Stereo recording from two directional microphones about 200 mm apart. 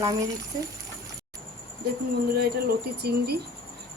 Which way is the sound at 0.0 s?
15° right (ahead or behind).